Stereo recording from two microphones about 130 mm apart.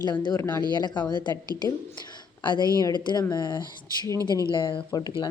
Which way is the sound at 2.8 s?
35° left (ahead or behind).